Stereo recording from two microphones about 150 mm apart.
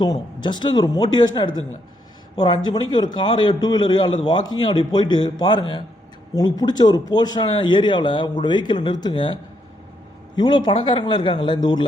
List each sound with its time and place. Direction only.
0.0 s a man's voice: 30° left (ahead or behind)